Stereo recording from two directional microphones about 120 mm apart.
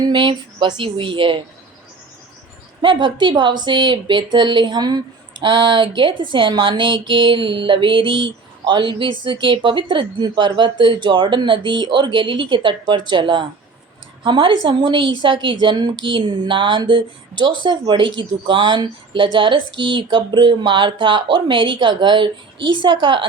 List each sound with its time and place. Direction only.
0.0 s speech: 40° right (ahead or behind)
2.8 s a woman's voice: 40° right (ahead or behind)